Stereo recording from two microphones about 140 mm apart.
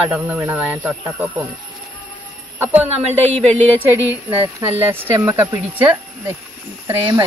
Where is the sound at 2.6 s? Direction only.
10° right (ahead or behind).